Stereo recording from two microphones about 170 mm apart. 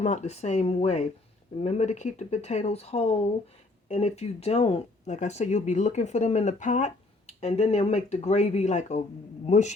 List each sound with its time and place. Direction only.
0.0 s speech: 40° left (ahead or behind)